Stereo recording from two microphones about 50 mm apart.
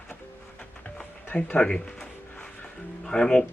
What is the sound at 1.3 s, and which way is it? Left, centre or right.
Speech, left.